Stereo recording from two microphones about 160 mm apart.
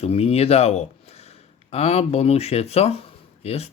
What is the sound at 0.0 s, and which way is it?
Speech, 40° left (ahead or behind).